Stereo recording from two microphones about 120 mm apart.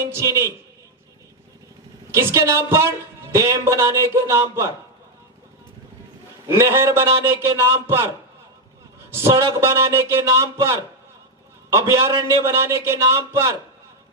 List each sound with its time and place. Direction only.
2.1 s a man's voice: 25° right (ahead or behind)
6.4 s a man's voice: 20° right (ahead or behind)
9.2 s a man's voice: 25° right (ahead or behind)